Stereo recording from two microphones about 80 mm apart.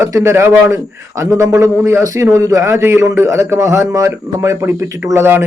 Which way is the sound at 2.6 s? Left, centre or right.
Right.